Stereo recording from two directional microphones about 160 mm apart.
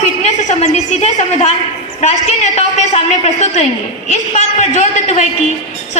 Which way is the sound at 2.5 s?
45° left (ahead or behind).